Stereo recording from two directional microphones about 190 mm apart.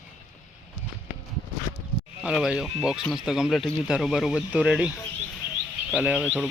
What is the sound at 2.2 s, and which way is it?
Speech, 5° right (ahead or behind).